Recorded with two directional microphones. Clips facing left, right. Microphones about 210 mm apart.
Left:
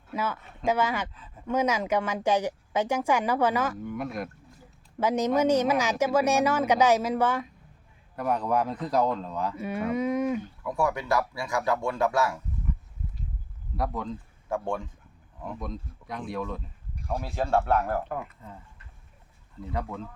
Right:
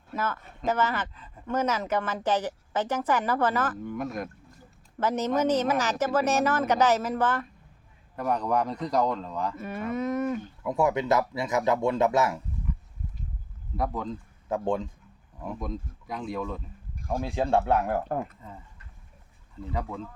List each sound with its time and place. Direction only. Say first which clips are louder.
0.1 s speech: even; 10° left (ahead or behind)
10.6 s speech: right 7 dB; 20° right (ahead or behind)
13.7 s speech: right 1 dB; centre (ahead or behind)
14.5 s speech: right 3 dB; 20° right (ahead or behind)
15.6 s speech: right 2 dB; centre (ahead or behind)
16.9 s a sound: right 1 dB; 45° right (ahead or behind)
17.2 s speech: right 1 dB; 15° right (ahead or behind)